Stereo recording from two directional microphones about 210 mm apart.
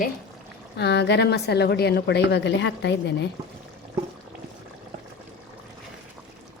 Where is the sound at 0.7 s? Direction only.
55° left (ahead or behind).